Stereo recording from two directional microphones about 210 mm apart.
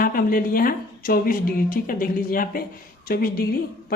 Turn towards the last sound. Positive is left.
turn(degrees=45)  # may be behind; listen again after turning